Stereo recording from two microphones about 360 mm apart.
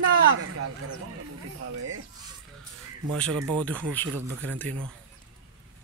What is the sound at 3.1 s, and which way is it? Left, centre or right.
A man's voice, centre.